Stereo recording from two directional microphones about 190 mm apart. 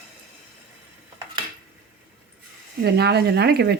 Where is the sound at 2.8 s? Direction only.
60° right (ahead or behind).